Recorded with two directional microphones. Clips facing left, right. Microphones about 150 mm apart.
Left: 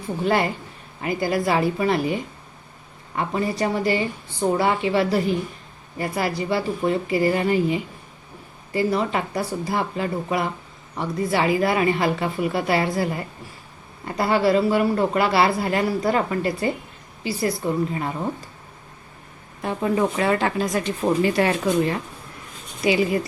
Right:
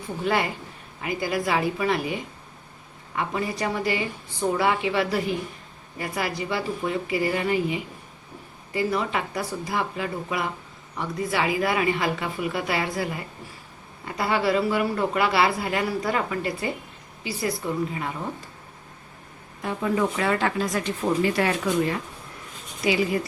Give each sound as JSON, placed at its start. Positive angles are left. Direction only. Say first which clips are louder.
{"t": 0.3, "sound": "speech", "louder": "left 3 dB", "side_deg": 40}
{"t": 3.2, "sound": "speech", "louder": "left 4 dB", "side_deg": 35}
{"t": 19.6, "sound": "speech", "louder": "left 3 dB", "side_deg": 30}